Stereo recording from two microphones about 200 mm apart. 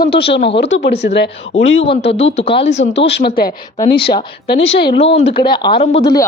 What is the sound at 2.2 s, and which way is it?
Speech, 30° left (ahead or behind).